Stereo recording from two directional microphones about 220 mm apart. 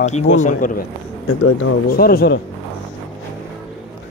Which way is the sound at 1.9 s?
45° left (ahead or behind).